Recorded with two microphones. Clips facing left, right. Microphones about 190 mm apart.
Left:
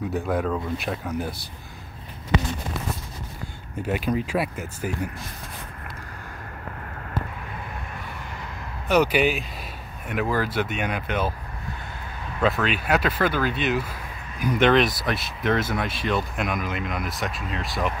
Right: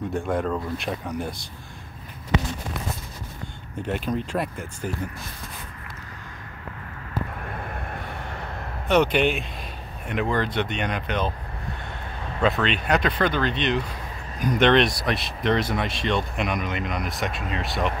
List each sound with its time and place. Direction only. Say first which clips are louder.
0.1 s speech: even; 5° left (ahead or behind)
3.8 s speech: left 2 dB; 5° left (ahead or behind)
7.4 s vehicle: right 3 dB; 55° right (ahead or behind)
8.8 s speech: even; 5° left (ahead or behind)
12.4 s speech: even; 5° left (ahead or behind)